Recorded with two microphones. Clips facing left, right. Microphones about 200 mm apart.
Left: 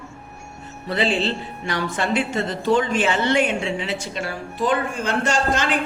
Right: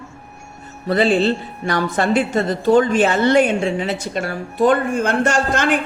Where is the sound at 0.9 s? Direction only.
45° right (ahead or behind).